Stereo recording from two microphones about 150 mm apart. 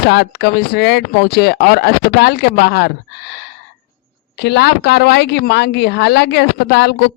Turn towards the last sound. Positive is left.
turn(degrees=90)